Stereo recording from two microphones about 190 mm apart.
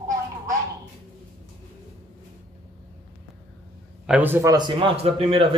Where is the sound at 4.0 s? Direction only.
10° right (ahead or behind); by 5.5 s 30° right (ahead or behind).